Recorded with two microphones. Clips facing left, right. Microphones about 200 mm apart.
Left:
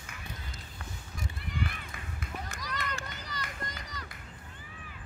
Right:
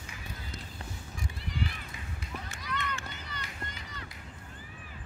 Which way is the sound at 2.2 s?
40° left (ahead or behind).